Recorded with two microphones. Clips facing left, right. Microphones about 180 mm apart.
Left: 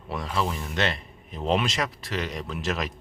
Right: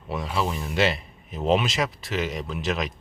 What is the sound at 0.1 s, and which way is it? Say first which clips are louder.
Speech: right 1 dB; 5° right (ahead or behind).